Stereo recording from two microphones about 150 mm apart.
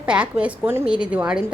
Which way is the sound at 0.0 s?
10° right (ahead or behind).